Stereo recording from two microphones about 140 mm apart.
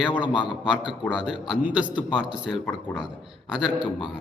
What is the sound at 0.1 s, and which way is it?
Speech, 35° left (ahead or behind).